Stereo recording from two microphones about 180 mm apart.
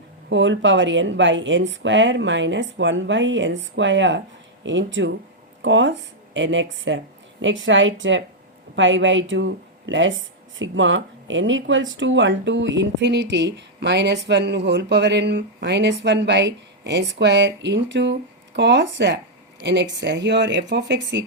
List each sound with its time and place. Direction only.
0.3 s speech: 90° right